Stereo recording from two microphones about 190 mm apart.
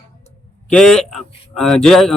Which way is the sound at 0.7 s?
5° left (ahead or behind).